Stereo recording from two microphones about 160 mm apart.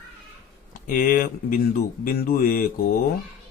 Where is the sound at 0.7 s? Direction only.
60° left (ahead or behind).